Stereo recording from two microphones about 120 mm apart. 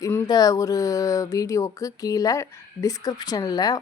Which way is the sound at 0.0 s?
25° left (ahead or behind).